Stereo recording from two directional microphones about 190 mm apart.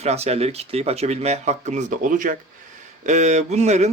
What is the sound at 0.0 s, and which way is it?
Speech, 35° right (ahead or behind).